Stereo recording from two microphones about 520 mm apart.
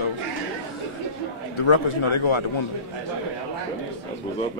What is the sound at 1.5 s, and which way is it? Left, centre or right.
Speech, left.